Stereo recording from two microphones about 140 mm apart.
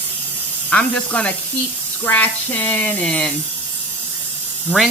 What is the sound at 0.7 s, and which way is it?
Speech, 5° left (ahead or behind).